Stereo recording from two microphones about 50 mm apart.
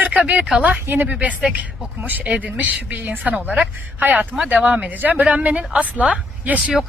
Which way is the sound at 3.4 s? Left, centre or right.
Right.